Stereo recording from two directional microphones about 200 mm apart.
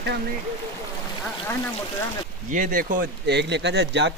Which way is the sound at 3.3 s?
60° right (ahead or behind).